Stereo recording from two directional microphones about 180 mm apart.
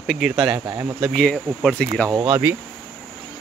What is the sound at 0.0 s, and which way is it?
Speech, centre (ahead or behind).